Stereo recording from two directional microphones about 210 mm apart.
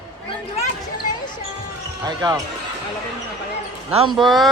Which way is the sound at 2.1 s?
20° right (ahead or behind).